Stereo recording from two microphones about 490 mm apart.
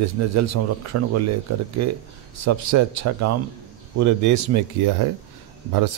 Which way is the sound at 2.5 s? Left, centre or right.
Right.